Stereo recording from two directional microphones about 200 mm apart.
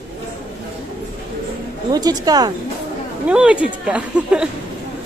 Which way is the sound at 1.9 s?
20° right (ahead or behind).